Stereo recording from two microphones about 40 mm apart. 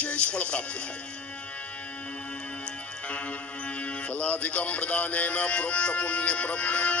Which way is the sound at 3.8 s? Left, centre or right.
Left.